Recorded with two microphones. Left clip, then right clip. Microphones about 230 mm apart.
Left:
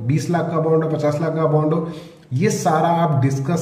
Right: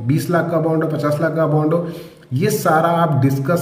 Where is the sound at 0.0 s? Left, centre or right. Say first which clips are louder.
Right 3 dB; centre.